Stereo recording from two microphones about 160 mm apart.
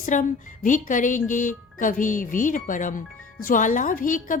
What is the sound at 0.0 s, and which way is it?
A woman's voice, 55° left (ahead or behind).